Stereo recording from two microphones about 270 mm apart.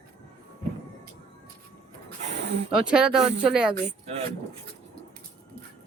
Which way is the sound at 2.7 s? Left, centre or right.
Centre.